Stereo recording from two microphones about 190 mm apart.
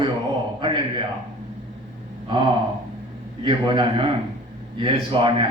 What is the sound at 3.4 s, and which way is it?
A man's voice, 25° right (ahead or behind).